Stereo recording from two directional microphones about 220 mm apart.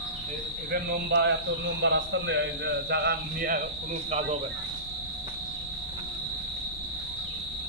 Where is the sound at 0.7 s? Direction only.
50° right (ahead or behind).